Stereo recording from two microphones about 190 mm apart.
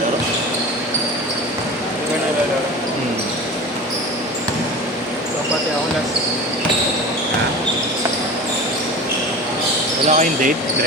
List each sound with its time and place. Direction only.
10.1 s speech: 40° right (ahead or behind)